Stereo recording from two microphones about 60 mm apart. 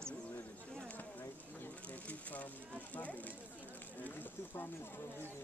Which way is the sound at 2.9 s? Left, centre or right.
Left.